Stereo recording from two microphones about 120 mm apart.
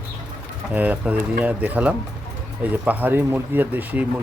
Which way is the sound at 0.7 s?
15° right (ahead or behind).